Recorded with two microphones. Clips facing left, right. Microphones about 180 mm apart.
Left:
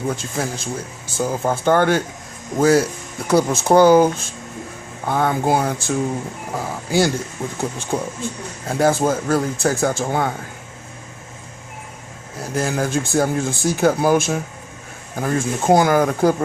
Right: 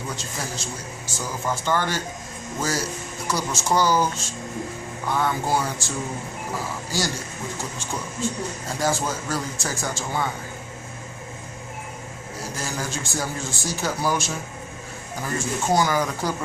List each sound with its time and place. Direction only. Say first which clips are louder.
0.1 s speech: left 7 dB; 55° left (ahead or behind)
12.5 s speech: left 11 dB; 55° left (ahead or behind)